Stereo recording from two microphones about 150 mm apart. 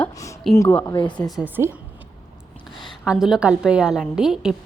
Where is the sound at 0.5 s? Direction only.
20° left (ahead or behind).